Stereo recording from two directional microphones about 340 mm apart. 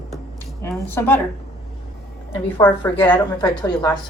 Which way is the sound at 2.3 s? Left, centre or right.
Centre.